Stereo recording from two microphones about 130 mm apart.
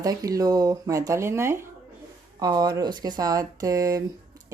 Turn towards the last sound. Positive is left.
turn(degrees=-25)  # may be behind; listen again after turning